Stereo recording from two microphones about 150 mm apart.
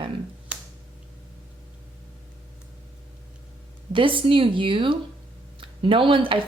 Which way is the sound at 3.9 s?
35° right (ahead or behind).